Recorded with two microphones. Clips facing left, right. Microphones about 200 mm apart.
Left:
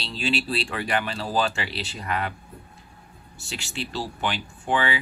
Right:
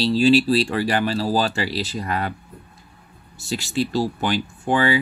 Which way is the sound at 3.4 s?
40° right (ahead or behind).